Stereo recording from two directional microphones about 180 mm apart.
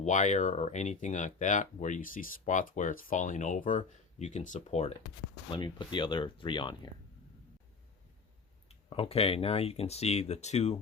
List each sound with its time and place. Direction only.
0.0 s speech: 40° left (ahead or behind)
5.5 s speech: 25° left (ahead or behind)
8.9 s speech: 30° left (ahead or behind)